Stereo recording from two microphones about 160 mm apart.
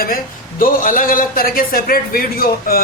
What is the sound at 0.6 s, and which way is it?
A man's voice, 60° left (ahead or behind).